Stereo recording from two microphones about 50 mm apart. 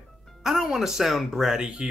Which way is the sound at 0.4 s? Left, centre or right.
Centre.